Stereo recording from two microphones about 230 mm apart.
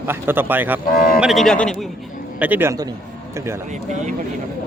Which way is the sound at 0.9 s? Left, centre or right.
Left.